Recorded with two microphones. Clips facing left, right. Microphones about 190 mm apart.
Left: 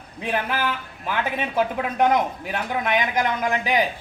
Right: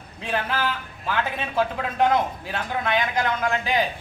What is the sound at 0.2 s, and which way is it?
A man's voice, 15° left (ahead or behind).